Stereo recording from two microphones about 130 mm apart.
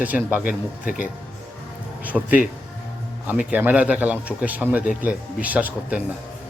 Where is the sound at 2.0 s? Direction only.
10° right (ahead or behind).